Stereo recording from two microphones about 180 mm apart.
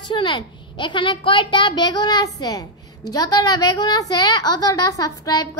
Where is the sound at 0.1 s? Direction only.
25° left (ahead or behind).